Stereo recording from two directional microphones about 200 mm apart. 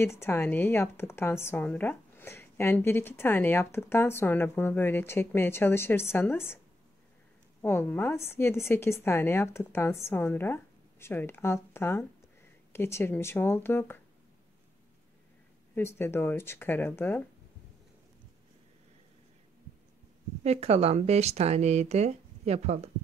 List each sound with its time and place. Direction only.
0.0 s speech: 10° left (ahead or behind)
7.6 s speech: 10° left (ahead or behind)
15.7 s speech: 10° left (ahead or behind)
20.4 s speech: 30° right (ahead or behind)